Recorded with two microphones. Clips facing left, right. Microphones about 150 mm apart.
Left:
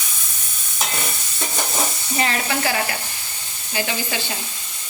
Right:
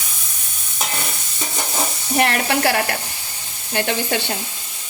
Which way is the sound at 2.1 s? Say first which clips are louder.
Right 5 dB; 60° right (ahead or behind).